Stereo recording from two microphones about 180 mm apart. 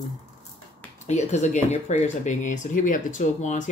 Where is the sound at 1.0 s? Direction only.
40° left (ahead or behind).